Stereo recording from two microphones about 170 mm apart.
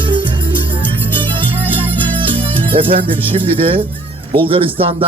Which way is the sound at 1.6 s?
10° left (ahead or behind).